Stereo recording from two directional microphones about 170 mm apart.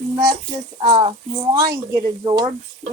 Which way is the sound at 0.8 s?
30° right (ahead or behind).